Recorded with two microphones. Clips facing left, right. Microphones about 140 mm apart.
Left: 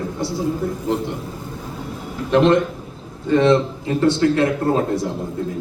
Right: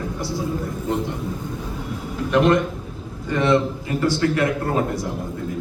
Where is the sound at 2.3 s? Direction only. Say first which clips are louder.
Left 3 dB; 25° left (ahead or behind).